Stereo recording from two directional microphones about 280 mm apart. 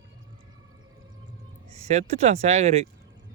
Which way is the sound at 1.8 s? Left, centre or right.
Right.